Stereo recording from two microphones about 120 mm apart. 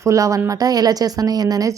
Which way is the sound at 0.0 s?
25° right (ahead or behind).